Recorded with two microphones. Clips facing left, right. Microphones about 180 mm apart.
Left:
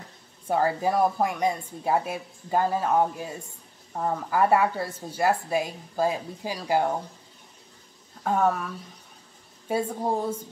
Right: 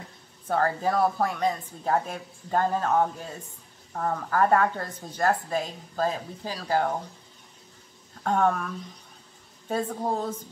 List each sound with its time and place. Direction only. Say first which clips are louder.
0.5 s a woman's voice: left 1 dB; 10° left (ahead or behind)
8.2 s a woman's voice: even; 5° left (ahead or behind)